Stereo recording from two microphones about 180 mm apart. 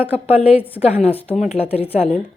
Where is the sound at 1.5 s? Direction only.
35° left (ahead or behind).